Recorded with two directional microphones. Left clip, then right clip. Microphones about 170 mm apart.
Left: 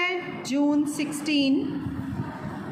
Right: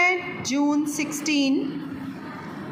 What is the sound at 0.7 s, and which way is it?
Speech, 10° left (ahead or behind).